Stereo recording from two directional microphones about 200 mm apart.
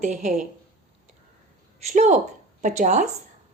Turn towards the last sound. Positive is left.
turn(degrees=-35)  # may be behind; listen again after turning